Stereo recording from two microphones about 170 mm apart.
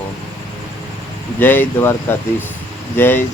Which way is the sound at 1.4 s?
10° left (ahead or behind).